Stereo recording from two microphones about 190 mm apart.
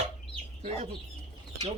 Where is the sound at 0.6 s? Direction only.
35° right (ahead or behind).